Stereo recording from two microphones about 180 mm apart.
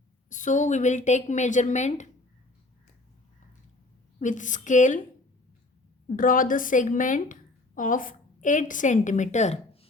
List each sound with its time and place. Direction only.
0.3 s a woman's voice: 45° left (ahead or behind)
4.2 s a woman's voice: 45° left (ahead or behind)
6.1 s a woman's voice: 50° left (ahead or behind)